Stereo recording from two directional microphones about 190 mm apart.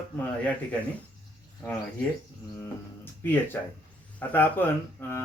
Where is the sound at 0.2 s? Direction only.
5° left (ahead or behind).